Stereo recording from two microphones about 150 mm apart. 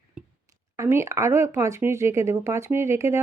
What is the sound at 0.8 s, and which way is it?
Speech, 20° right (ahead or behind).